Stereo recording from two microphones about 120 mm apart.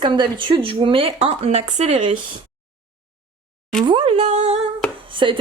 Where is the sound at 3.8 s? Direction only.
45° right (ahead or behind); by 4.6 s 65° right (ahead or behind).